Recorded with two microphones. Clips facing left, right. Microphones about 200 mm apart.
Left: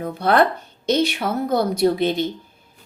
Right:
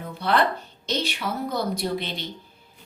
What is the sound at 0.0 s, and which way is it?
Speech, 50° left (ahead or behind).